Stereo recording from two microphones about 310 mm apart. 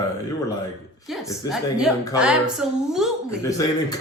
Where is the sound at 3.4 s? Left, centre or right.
Centre.